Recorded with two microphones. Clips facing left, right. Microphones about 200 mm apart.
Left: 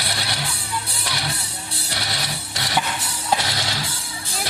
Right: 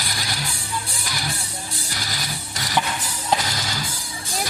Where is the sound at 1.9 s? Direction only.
70° left (ahead or behind).